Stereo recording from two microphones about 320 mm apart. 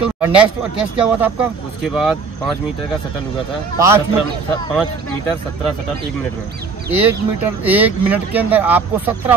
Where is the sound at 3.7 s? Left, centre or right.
Centre.